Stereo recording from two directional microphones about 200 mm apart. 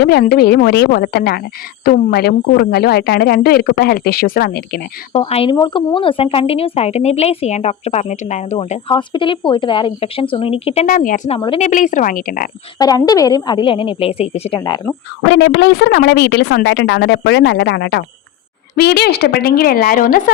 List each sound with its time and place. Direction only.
0.0 s speech: 55° left (ahead or behind)
5.1 s speech: 30° left (ahead or behind)
10.8 s a woman's voice: 40° left (ahead or behind)
11.3 s speech: 25° left (ahead or behind)
11.6 s a woman's voice: 40° left (ahead or behind)
12.8 s speech: 20° left (ahead or behind)
15.3 s a woman's voice: 60° left (ahead or behind); by 20.3 s 45° left (ahead or behind)